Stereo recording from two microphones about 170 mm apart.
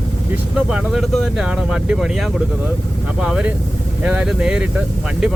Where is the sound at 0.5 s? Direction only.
5° right (ahead or behind).